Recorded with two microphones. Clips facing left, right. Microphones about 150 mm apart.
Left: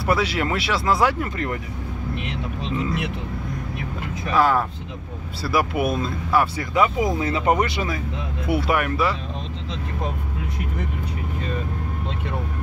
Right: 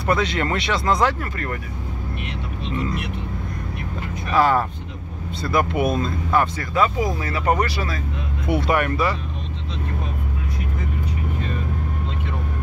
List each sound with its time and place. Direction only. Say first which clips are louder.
0.0 s speech: even; 5° left (ahead or behind)
1.2 s speech: left 2 dB; 20° left (ahead or behind)
2.8 s vehicle: left 1 dB; 90° left
4.3 s speech: right 1 dB; centre (ahead or behind); by 8.0 s 20° left (ahead or behind)
8.5 s speech: right 1 dB; 5° left (ahead or behind)